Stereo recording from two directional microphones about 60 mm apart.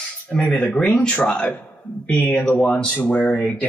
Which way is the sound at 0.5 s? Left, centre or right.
Left.